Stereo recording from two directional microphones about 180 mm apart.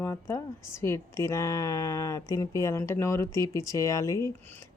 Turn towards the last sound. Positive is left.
turn(degrees=20)  # may be behind; listen again after turning